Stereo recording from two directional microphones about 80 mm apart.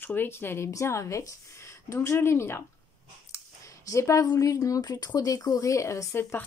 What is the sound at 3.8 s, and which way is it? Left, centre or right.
Speech, left.